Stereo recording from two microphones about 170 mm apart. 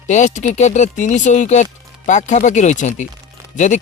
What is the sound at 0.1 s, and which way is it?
Speech, 45° left (ahead or behind).